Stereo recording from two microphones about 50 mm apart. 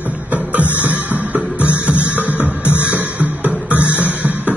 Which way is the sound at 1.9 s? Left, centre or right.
Left.